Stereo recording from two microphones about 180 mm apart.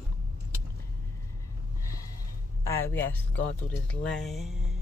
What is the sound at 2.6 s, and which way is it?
Speech, 15° left (ahead or behind).